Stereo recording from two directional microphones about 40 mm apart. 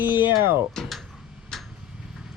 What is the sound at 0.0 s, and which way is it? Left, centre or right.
Speech, right.